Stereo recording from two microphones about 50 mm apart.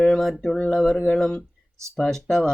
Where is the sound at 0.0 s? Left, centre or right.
Centre.